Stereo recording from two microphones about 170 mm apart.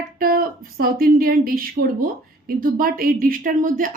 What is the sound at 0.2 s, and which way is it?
A woman's voice, 60° right (ahead or behind).